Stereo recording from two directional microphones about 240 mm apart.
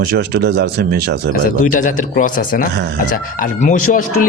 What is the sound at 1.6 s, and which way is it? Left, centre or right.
A man's voice, left.